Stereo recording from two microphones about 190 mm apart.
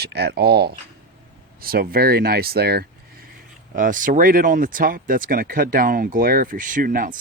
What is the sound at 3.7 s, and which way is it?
Speech, 45° right (ahead or behind).